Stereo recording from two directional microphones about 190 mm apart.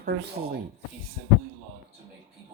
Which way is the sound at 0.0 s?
50° right (ahead or behind).